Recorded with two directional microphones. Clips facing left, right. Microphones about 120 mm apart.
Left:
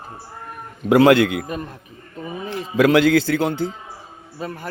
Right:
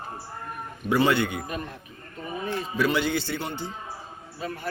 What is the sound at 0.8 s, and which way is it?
Speech, 90° left.